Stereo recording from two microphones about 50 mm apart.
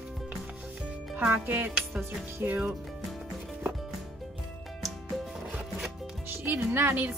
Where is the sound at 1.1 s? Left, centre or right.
Right.